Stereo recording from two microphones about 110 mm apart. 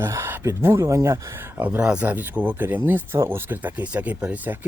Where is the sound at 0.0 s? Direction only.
20° right (ahead or behind).